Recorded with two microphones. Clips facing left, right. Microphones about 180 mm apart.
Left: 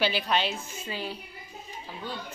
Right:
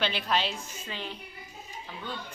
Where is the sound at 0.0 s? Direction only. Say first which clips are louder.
Left 2 dB; centre (ahead or behind).